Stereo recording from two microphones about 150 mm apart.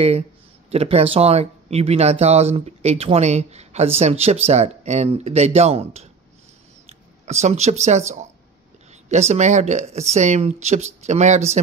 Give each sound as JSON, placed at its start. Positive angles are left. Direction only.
{"t": 0.7, "sound": "speech", "side_deg": -45}